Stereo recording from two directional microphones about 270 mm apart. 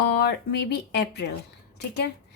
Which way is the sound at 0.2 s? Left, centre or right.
Left.